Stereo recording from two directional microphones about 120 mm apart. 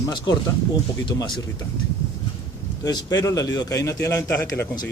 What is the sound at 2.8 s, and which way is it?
A man's voice, 30° left (ahead or behind).